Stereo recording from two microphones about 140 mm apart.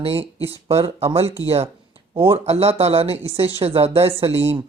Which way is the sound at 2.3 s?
45° right (ahead or behind).